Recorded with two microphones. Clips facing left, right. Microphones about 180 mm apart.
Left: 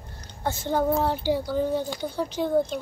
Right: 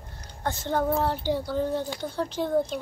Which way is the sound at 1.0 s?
5° left (ahead or behind).